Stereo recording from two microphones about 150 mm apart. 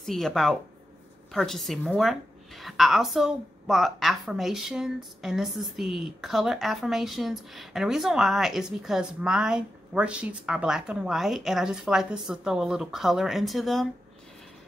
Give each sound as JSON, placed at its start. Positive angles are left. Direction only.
{"t": 0.0, "sound": "a woman's voice", "side_deg": 0}